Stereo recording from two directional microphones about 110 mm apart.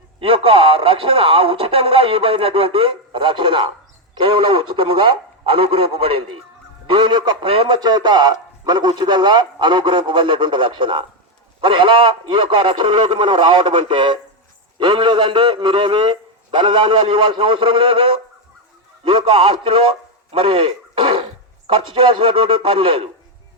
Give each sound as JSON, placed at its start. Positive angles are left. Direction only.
{"t": 0.2, "sound": "a man's voice", "side_deg": -55}
{"t": 7.8, "sound": "a man's voice", "side_deg": -40}
{"t": 20.3, "sound": "a sound", "side_deg": -50}
{"t": 21.7, "sound": "a man's voice", "side_deg": -50}